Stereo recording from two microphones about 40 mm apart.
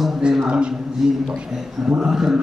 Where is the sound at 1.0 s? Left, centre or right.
Centre.